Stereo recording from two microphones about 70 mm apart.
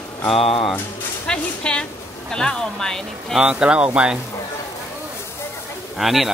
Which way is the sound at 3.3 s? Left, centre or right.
Centre.